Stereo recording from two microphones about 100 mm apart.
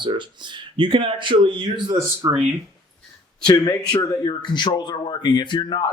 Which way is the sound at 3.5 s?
40° left (ahead or behind).